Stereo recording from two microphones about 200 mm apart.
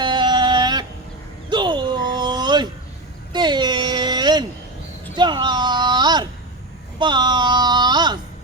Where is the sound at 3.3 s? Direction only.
20° right (ahead or behind).